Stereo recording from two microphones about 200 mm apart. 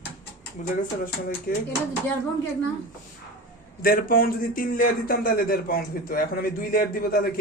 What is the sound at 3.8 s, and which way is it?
Speech, 45° left (ahead or behind).